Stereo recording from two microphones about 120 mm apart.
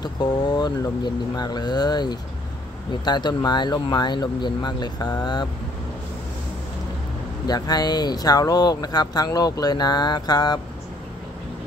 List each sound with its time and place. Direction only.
0.0 s speech: 35° left (ahead or behind)
7.4 s speech: 35° left (ahead or behind)